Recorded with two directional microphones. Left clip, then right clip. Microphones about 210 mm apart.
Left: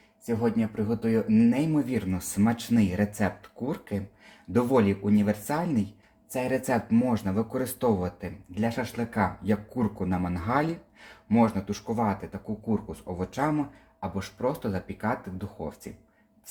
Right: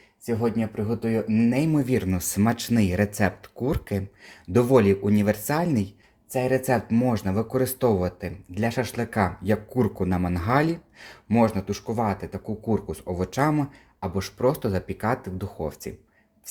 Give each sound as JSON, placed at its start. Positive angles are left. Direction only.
{"t": 0.3, "sound": "speech", "side_deg": -30}
{"t": 6.3, "sound": "speech", "side_deg": -20}